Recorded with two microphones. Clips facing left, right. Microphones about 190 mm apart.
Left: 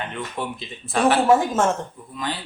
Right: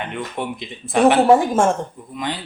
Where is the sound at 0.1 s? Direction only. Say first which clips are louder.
Right 3 dB; 15° right (ahead or behind).